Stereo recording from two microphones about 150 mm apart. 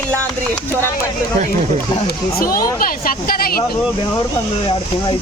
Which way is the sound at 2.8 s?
70° left (ahead or behind).